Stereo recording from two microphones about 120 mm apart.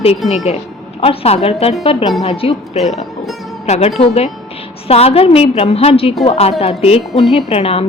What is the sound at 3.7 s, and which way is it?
A woman's voice, 60° left (ahead or behind).